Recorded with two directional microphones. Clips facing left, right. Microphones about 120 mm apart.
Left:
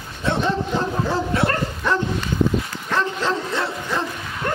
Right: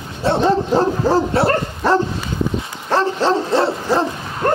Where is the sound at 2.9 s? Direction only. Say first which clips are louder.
Right 6 dB; 30° right (ahead or behind).